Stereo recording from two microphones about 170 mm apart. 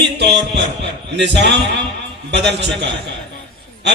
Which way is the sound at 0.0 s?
85° right.